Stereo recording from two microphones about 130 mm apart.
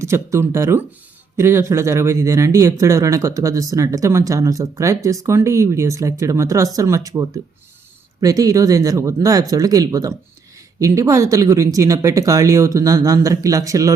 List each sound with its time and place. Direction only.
0.0 s speech: 20° right (ahead or behind)